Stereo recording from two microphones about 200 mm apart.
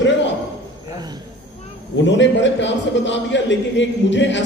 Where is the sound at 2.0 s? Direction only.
65° left (ahead or behind).